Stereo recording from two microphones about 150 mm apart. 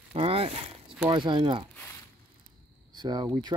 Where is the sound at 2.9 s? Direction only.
30° right (ahead or behind).